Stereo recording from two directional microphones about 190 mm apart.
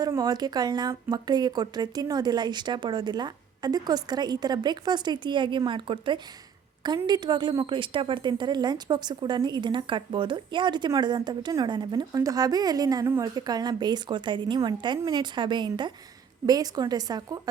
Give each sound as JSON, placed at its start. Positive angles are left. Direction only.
{"t": 0.0, "sound": "a woman's voice", "side_deg": -20}